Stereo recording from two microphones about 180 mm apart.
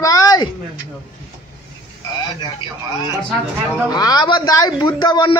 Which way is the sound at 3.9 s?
20° left (ahead or behind).